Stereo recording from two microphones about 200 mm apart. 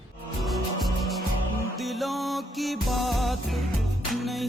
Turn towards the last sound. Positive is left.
turn(degrees=0)  # may be behind; listen again after turning